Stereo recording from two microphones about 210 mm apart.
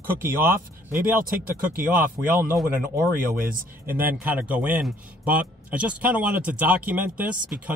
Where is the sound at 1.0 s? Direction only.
40° right (ahead or behind).